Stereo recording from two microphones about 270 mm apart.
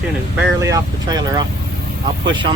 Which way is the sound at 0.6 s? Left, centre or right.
Centre.